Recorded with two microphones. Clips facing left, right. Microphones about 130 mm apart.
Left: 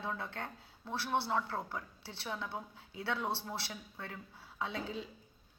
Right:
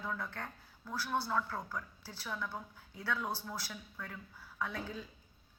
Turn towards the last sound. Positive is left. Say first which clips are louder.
# left 1 dB
turn(degrees=25)  # may be behind; listen again after turning